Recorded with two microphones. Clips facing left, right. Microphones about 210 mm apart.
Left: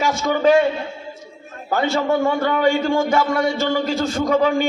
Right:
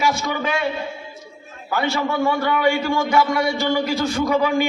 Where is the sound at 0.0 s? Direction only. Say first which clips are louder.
Left 5 dB; 40° left (ahead or behind).